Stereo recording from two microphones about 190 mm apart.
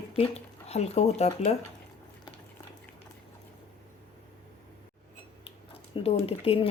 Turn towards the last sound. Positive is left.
turn(degrees=30)  # may be behind; listen again after turning